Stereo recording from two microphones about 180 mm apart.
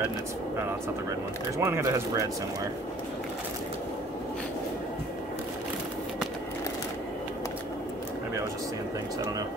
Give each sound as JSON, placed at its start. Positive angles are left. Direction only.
{"t": 1.6, "sound": "speech", "side_deg": -15}